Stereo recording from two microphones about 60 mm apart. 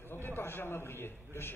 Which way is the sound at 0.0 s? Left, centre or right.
Left.